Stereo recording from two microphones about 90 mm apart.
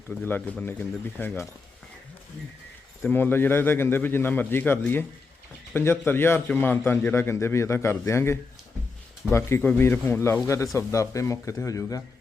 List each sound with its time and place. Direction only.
0.3 s a man's voice: 20° left (ahead or behind)
3.1 s a man's voice: 25° left (ahead or behind)
9.6 s a man's voice: 20° left (ahead or behind); by 12.0 s 35° left (ahead or behind)